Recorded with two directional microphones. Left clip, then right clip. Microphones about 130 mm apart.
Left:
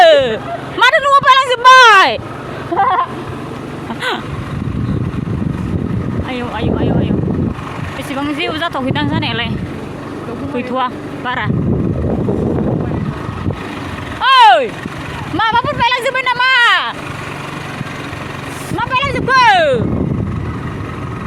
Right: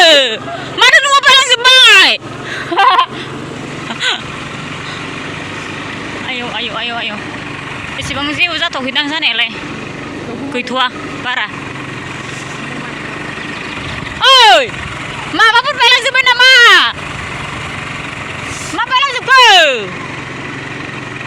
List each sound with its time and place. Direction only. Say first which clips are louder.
0.0 s vehicle: even; 20° left (ahead or behind)
0.8 s a sound: right 2 dB; 20° left (ahead or behind)
2.7 s a sound: right 4 dB; 25° right (ahead or behind)
6.3 s vehicle: even; 35° left (ahead or behind)
8.1 s speech: right 4 dB; 25° left (ahead or behind)
10.5 s speech: right 3 dB; 10° left (ahead or behind)
11.3 s speech: right 2 dB; 30° left (ahead or behind)
14.2 s vehicle: right 2 dB; 15° left (ahead or behind)
15.4 s speech: right 5 dB; 15° left (ahead or behind)
18.9 s speech: right 4 dB; 35° left (ahead or behind)